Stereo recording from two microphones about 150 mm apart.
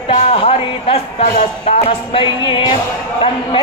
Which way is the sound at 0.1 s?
40° left (ahead or behind).